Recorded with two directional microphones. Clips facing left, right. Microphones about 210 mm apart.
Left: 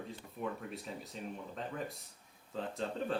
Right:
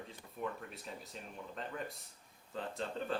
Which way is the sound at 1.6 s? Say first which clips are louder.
Even; centre (ahead or behind).